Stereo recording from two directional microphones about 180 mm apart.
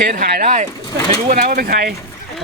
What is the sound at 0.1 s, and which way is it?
Speech, 60° right (ahead or behind).